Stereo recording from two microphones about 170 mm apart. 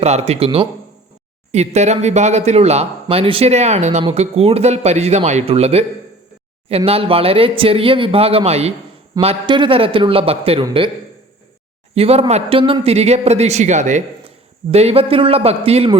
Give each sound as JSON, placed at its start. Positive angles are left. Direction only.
{"t": 0.0, "sound": "speech", "side_deg": -40}
{"t": 11.9, "sound": "speech", "side_deg": -35}